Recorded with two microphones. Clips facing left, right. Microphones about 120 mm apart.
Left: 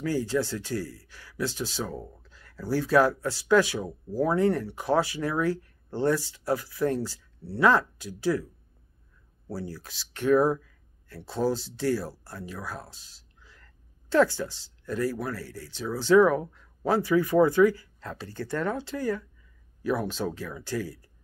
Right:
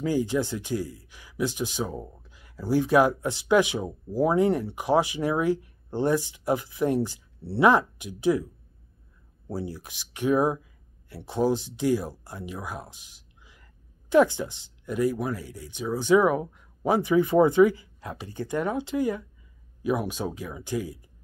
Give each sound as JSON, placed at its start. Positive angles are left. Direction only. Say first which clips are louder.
{"t": 0.0, "sound": "speech", "louder": "right 2 dB", "side_deg": -15}
{"t": 9.5, "sound": "speech", "louder": "right 3 dB", "side_deg": -15}